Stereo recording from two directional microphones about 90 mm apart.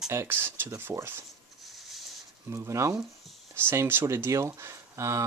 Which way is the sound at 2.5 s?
35° right (ahead or behind).